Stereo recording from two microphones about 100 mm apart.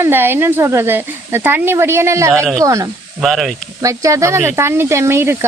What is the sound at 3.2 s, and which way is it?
Speech, centre (ahead or behind).